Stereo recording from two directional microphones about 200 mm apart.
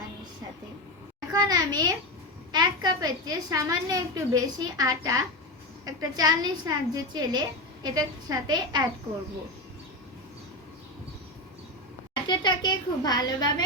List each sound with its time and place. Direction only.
1.3 s a woman's voice: 20° right (ahead or behind)
12.3 s a woman's voice: 20° left (ahead or behind)